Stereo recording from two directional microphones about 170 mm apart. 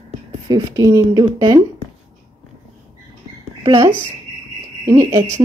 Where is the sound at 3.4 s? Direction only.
20° right (ahead or behind).